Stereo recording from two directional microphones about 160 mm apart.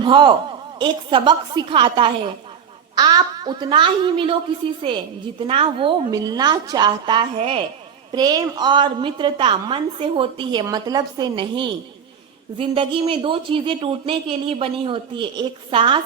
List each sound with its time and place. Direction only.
0.0 s a woman's voice: 30° right (ahead or behind)
6.1 s a woman's voice: 25° right (ahead or behind)